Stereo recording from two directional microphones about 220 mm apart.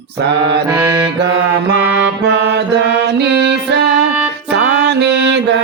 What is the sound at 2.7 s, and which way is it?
Music, 50° right (ahead or behind).